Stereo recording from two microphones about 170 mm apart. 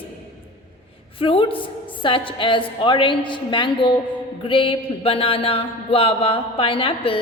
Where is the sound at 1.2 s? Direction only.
35° left (ahead or behind).